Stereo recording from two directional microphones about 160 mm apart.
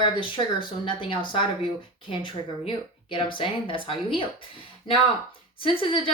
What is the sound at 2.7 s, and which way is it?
A woman's voice, 30° left (ahead or behind).